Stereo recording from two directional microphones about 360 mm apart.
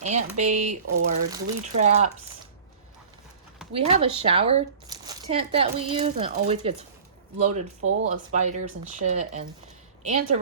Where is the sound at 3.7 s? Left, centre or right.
Centre.